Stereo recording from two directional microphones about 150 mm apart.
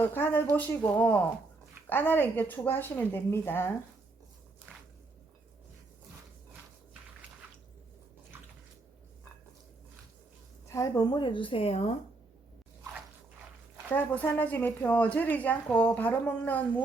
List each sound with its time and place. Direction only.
0.0 s a woman's voice: 15° left (ahead or behind)
10.7 s a woman's voice: 20° left (ahead or behind); by 11.9 s 45° left (ahead or behind)
13.9 s a woman's voice: 10° left (ahead or behind)